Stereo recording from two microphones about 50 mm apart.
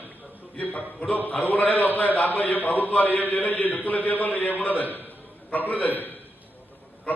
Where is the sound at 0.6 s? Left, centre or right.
Left.